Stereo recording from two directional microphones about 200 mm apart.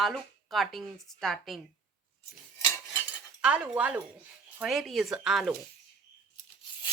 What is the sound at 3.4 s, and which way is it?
Speech, 5° right (ahead or behind).